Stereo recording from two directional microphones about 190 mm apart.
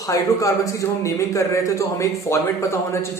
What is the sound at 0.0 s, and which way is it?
A man's voice, 15° left (ahead or behind).